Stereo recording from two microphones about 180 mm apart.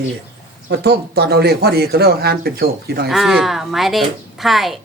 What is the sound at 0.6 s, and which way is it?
Speech, 70° right (ahead or behind).